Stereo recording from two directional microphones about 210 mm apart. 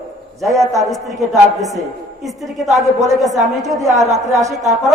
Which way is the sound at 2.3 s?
Centre (ahead or behind).